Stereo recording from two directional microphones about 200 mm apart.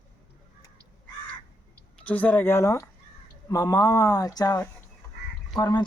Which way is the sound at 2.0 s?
5° left (ahead or behind).